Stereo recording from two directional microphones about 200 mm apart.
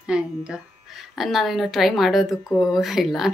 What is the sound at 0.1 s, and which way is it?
A woman's voice, 5° right (ahead or behind).